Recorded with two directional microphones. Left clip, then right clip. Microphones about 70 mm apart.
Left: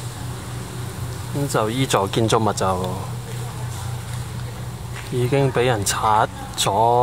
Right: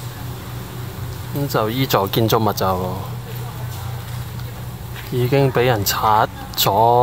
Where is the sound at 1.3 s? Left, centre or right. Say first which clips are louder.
Right 1 dB; centre.